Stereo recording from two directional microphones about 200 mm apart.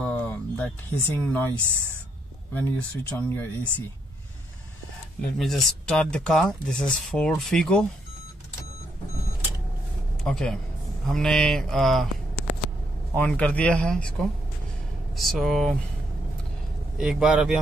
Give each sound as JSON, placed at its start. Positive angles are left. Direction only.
{"t": 0.0, "sound": "a sound", "side_deg": 5}
{"t": 2.5, "sound": "speech", "side_deg": 10}
{"t": 5.2, "sound": "speech", "side_deg": 0}
{"t": 10.2, "sound": "speech", "side_deg": 0}
{"t": 13.1, "sound": "speech", "side_deg": 5}
{"t": 15.1, "sound": "speech", "side_deg": 0}
{"t": 17.0, "sound": "speech", "side_deg": 0}